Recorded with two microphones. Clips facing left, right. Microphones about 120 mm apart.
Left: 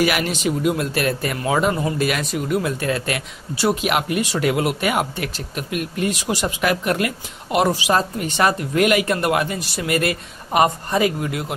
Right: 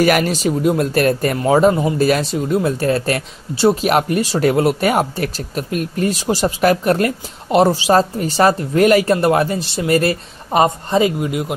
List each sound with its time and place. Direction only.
0.0 s speech: 40° right (ahead or behind); by 11.5 s 20° right (ahead or behind)